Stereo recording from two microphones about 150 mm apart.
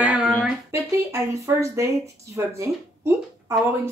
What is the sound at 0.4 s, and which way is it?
Speech, 15° right (ahead or behind).